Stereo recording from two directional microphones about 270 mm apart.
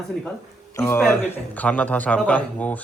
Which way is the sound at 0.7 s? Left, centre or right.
Centre.